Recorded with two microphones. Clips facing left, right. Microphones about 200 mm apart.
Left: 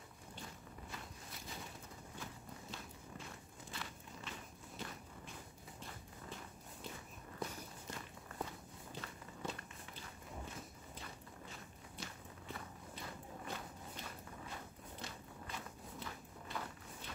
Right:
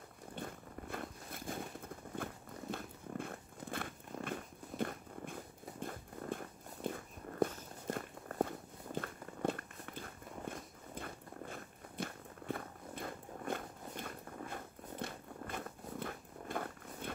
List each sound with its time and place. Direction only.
0.4 s vehicle: 55° right (ahead or behind)
2.2 s walk: 55° right (ahead or behind)
2.7 s a sound: 55° right (ahead or behind)